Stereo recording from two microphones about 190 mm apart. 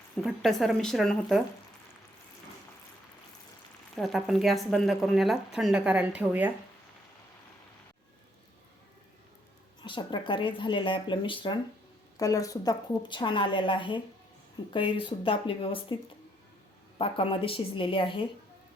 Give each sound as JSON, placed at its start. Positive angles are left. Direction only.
{"t": 0.2, "sound": "speech", "side_deg": 0}
{"t": 3.9, "sound": "speech", "side_deg": 0}
{"t": 9.8, "sound": "a woman's voice", "side_deg": 25}
{"t": 17.0, "sound": "a woman's voice", "side_deg": 30}